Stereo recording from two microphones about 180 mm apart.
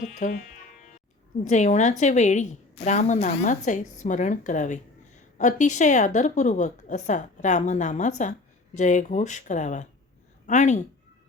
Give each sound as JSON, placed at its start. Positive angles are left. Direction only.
{"t": 0.0, "sound": "a woman's voice", "side_deg": 45}
{"t": 1.5, "sound": "a woman's voice", "side_deg": 40}